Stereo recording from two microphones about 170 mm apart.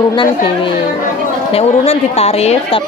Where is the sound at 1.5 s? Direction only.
40° left (ahead or behind).